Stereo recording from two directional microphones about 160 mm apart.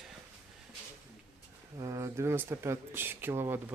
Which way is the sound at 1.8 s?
20° right (ahead or behind).